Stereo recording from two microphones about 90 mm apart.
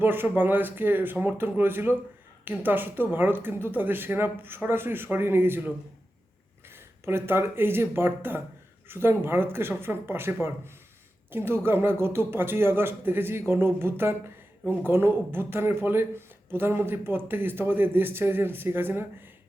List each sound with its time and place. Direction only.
0.0 s speech: 25° right (ahead or behind)
7.0 s speech: 25° right (ahead or behind)